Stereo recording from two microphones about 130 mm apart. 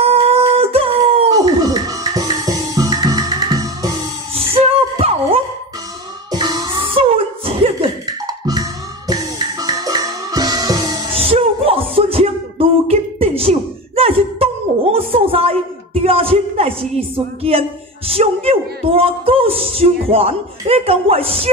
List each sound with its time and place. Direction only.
0.0 s howl: 50° right (ahead or behind)
1.3 s music: 30° right (ahead or behind)
4.4 s a sound: 45° right (ahead or behind)
6.3 s music: 35° right (ahead or behind)
8.3 s music: 30° right (ahead or behind)
11.1 s a sound: 45° right (ahead or behind)